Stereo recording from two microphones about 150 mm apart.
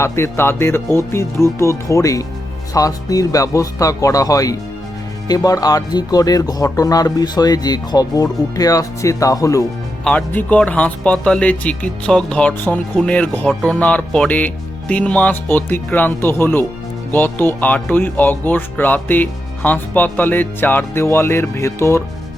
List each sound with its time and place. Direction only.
0.0 s speech: 15° left (ahead or behind)
10.0 s speech: 10° left (ahead or behind)